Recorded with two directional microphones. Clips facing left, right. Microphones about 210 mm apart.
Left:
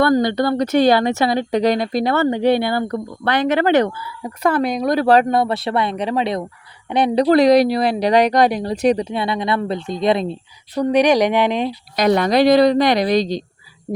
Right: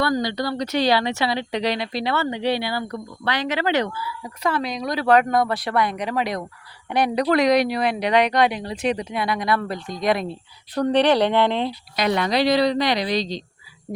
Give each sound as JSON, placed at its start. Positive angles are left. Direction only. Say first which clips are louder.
{"t": 0.0, "sound": "a woman's voice", "louder": "left 7 dB", "side_deg": 55}
{"t": 5.0, "sound": "speech", "louder": "left 1 dB", "side_deg": 30}
{"t": 10.8, "sound": "speech", "louder": "left 3 dB", "side_deg": 10}
{"t": 11.9, "sound": "a woman's voice", "louder": "left 6 dB", "side_deg": 45}